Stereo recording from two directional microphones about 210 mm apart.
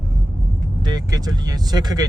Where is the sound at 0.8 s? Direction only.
20° right (ahead or behind).